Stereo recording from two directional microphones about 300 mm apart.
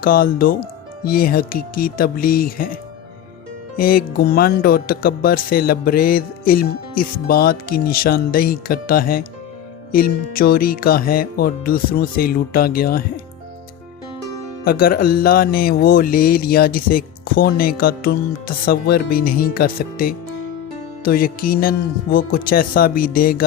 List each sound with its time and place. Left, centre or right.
0.0 s music: left
3.8 s music: left
14.6 s music: left